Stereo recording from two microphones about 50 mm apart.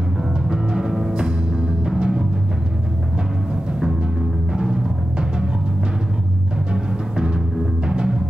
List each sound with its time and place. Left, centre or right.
0.2 s timpani: centre
4.5 s timpani: centre
7.8 s timpani: centre